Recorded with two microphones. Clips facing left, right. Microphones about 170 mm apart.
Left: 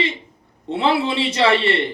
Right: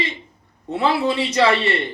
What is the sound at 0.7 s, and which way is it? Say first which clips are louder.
A man's voice: even; 25° left (ahead or behind).